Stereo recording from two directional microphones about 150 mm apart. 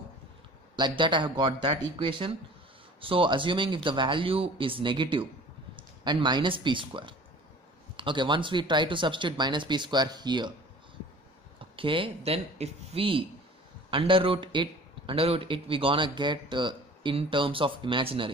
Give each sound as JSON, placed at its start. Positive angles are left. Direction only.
{"t": 0.7, "sound": "a man's voice", "side_deg": -30}
{"t": 11.7, "sound": "a man's voice", "side_deg": -35}